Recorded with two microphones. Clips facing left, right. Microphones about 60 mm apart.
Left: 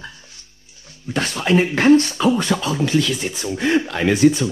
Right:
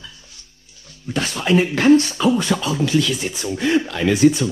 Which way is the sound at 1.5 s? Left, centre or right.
Left.